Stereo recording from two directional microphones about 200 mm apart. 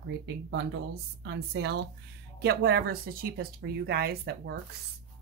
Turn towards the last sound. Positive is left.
turn(degrees=-50)  # may be behind; listen again after turning